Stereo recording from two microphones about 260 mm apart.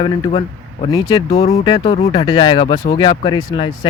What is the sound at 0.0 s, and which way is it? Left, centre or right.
A man's voice, left.